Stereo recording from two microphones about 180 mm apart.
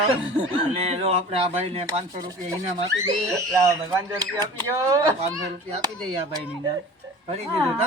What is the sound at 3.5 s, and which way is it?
Speech, 15° right (ahead or behind).